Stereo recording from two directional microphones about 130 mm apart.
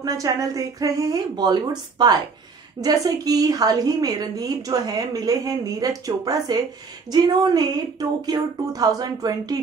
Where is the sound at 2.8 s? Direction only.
30° right (ahead or behind).